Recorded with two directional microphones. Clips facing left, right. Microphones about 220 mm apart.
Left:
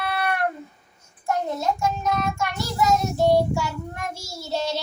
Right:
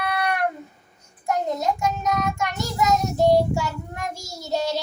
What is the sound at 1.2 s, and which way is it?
Child singing, 15° right (ahead or behind).